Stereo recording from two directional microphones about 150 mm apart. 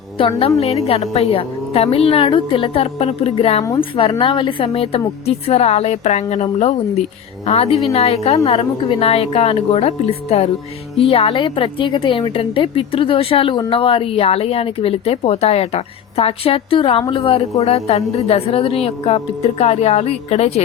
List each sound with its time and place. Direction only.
0.2 s a woman's voice: 35° left (ahead or behind)